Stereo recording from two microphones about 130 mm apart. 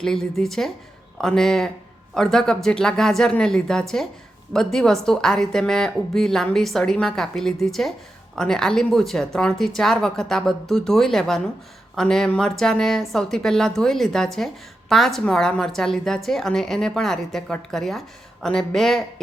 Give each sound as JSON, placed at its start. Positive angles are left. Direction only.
{"t": 0.0, "sound": "a woman's voice", "side_deg": 5}